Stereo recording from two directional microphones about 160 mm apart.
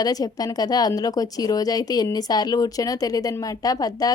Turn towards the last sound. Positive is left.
turn(degrees=25)  # may be behind; listen again after turning